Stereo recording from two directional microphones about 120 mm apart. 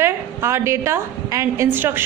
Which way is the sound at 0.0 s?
20° right (ahead or behind).